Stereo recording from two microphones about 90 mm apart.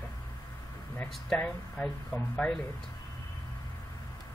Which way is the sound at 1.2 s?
10° left (ahead or behind).